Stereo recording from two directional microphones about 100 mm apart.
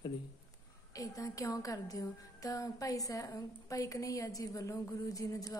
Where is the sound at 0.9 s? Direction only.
35° left (ahead or behind).